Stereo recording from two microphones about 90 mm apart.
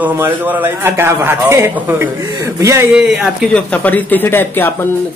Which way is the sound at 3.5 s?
15° left (ahead or behind).